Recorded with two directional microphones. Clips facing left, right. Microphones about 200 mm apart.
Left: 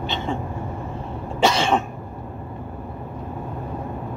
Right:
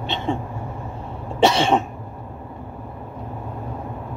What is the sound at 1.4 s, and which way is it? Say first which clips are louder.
Cough: right 3 dB; 30° right (ahead or behind).